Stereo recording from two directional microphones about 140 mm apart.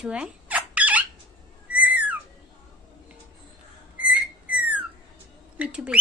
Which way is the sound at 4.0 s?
10° right (ahead or behind).